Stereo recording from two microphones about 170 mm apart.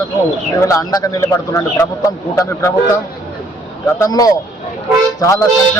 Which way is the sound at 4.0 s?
20° left (ahead or behind).